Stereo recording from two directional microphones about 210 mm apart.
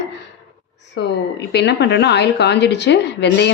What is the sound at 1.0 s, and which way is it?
Speech, 55° left (ahead or behind).